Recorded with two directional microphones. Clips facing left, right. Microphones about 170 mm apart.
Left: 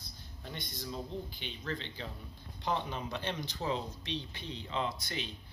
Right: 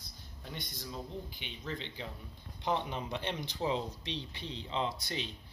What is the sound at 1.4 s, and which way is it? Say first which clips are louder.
Speech: left 1 dB; 15° right (ahead or behind).